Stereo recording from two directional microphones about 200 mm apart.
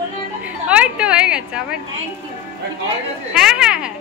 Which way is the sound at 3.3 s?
5° right (ahead or behind).